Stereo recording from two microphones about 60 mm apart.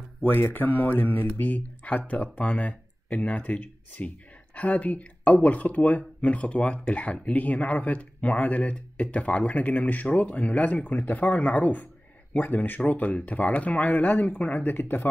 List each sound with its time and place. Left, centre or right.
0.2 s speech: left
14.7 s speech: left